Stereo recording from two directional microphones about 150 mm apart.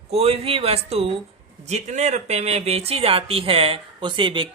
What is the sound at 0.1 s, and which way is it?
Speech, 45° right (ahead or behind).